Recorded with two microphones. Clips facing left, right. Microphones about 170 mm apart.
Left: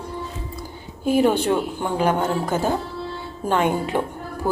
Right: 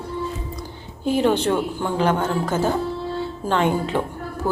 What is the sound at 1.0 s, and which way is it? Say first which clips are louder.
A woman's voice: left 1 dB; 10° left (ahead or behind).